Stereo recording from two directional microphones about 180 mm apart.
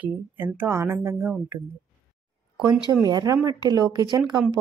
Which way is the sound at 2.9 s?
20° right (ahead or behind).